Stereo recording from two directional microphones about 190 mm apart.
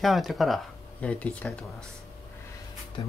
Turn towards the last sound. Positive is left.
turn(degrees=25)  # may be behind; listen again after turning